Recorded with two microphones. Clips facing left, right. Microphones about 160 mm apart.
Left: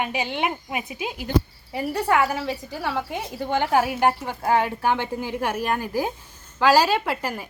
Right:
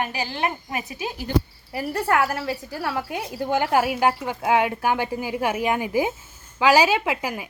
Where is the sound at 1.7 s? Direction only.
Centre (ahead or behind).